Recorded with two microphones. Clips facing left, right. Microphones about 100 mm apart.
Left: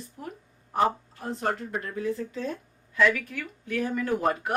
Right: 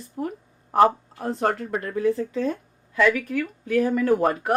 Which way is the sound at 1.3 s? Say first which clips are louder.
Right 5 dB; 80° right.